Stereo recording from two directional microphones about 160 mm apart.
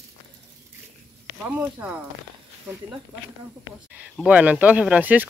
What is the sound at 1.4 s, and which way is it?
Speech, 10° right (ahead or behind).